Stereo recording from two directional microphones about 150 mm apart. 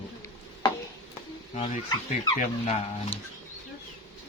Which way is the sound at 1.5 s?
50° left (ahead or behind).